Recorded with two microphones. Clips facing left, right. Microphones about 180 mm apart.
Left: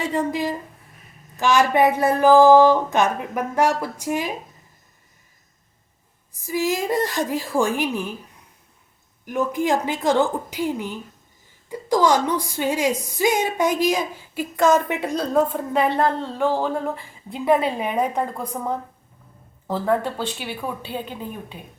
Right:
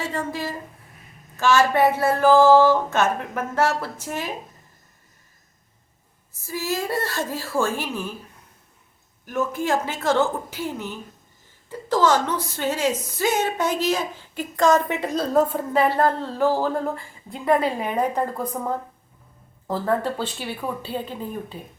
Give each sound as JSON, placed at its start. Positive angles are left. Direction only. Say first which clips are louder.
{"t": 0.0, "sound": "a woman's voice", "louder": "left 5 dB", "side_deg": 15}
{"t": 6.3, "sound": "a woman's voice", "louder": "left 4 dB", "side_deg": 15}
{"t": 9.2, "sound": "a woman's voice", "louder": "left 2 dB", "side_deg": 15}
{"t": 15.1, "sound": "a woman's voice", "louder": "even", "side_deg": -5}
{"t": 17.6, "sound": "a woman's voice", "louder": "left 1 dB", "side_deg": 15}
{"t": 17.9, "sound": "a woman's voice", "louder": "even", "side_deg": 0}